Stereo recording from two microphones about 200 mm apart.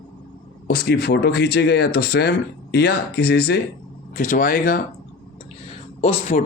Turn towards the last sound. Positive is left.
turn(degrees=35)  # may be behind; listen again after turning